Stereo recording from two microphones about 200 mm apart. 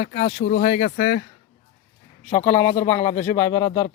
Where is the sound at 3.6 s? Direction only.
30° left (ahead or behind).